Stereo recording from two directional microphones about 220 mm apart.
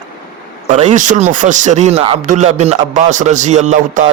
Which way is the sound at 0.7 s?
35° right (ahead or behind).